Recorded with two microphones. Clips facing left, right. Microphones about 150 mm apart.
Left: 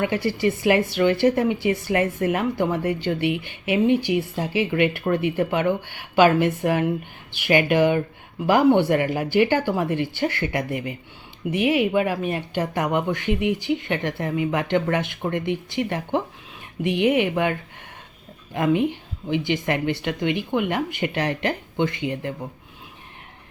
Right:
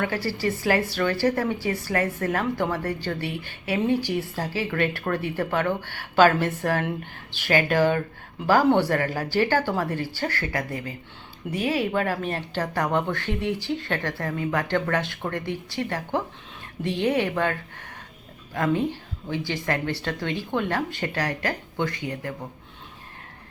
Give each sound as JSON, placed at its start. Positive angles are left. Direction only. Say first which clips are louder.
{"t": 0.0, "sound": "a woman's voice", "louder": "left 4 dB", "side_deg": 20}